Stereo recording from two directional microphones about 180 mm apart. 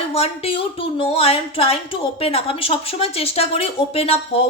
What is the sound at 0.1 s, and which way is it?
Speech, 35° left (ahead or behind).